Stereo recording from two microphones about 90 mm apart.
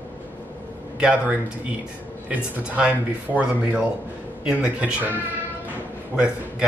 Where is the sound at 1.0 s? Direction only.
15° right (ahead or behind).